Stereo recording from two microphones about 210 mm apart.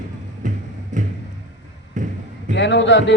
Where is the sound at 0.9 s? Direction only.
35° right (ahead or behind).